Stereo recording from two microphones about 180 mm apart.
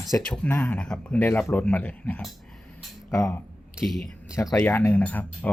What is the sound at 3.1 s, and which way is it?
Speech, 15° left (ahead or behind).